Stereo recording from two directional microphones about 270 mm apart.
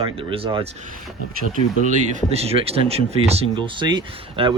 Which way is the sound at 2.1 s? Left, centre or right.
Right.